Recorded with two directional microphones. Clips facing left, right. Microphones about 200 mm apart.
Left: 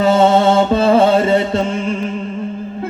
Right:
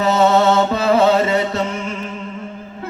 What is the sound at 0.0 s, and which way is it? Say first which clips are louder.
Chant: left 3 dB; 30° left (ahead or behind).